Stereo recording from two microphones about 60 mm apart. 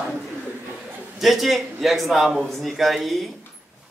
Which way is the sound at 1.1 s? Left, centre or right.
Centre.